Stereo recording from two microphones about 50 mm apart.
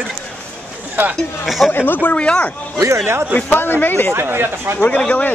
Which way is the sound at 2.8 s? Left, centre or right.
Right.